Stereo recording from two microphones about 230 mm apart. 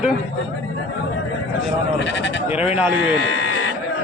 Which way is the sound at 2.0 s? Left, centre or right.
Left.